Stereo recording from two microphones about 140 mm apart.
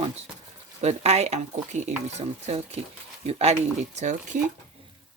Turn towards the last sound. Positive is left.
turn(degrees=-60)  # may be behind; listen again after turning